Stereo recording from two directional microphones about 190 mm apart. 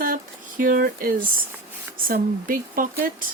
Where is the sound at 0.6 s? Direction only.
45° right (ahead or behind).